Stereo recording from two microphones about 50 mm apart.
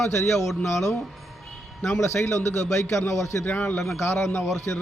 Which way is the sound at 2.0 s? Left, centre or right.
Left.